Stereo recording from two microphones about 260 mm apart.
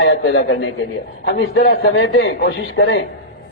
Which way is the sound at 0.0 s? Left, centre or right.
Left.